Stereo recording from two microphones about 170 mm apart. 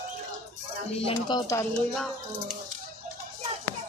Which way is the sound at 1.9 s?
Centre (ahead or behind).